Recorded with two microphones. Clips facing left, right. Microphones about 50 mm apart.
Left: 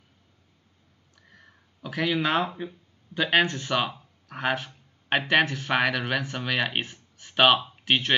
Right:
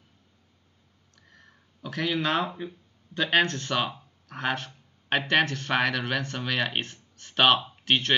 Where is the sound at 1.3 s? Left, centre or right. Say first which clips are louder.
Left 1 dB; centre.